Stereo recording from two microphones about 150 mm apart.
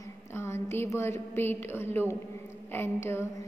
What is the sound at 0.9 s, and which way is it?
A woman's voice, 15° left (ahead or behind).